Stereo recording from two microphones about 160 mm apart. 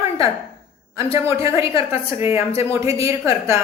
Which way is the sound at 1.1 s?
20° right (ahead or behind).